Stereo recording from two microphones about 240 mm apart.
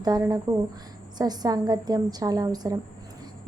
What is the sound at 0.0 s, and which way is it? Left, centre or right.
A woman's voice, centre.